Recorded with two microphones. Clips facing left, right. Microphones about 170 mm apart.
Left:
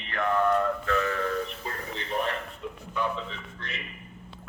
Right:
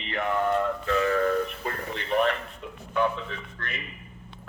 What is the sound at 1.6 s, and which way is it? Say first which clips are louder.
Radio: right 4 dB; 60° right (ahead or behind).